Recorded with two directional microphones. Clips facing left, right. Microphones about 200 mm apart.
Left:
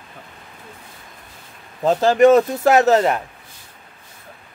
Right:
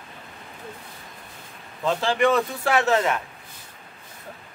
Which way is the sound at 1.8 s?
40° left (ahead or behind).